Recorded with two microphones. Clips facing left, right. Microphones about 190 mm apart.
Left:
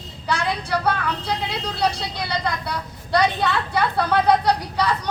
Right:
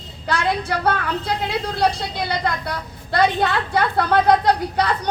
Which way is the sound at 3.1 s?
55° right (ahead or behind).